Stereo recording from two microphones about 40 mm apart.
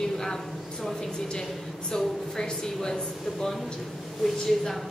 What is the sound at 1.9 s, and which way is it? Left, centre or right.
A woman's voice, centre.